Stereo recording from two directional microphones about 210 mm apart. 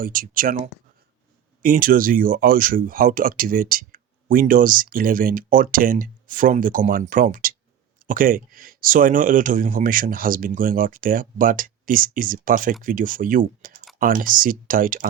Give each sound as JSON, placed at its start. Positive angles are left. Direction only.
{"t": 0.0, "sound": "speech", "side_deg": -40}